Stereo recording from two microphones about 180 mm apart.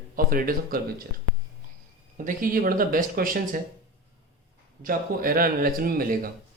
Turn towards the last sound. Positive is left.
turn(degrees=-55)  # may be behind; listen again after turning